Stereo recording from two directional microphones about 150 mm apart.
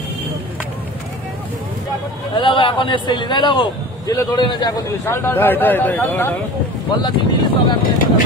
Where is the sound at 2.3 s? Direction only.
35° left (ahead or behind).